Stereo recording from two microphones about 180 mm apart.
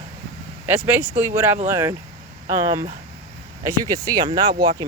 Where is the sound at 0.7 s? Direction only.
10° right (ahead or behind).